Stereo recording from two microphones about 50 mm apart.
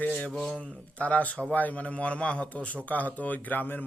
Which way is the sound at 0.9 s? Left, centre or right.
Left.